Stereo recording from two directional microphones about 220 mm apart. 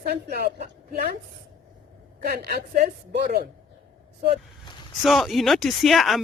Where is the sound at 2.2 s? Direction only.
40° right (ahead or behind).